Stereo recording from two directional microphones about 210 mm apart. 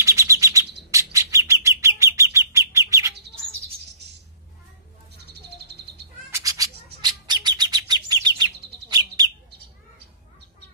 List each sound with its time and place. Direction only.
0.0 s chirp: 15° right (ahead or behind)
0.9 s bird: 15° right (ahead or behind)
5.2 s bird: 50° right (ahead or behind)
6.3 s bird: 15° right (ahead or behind)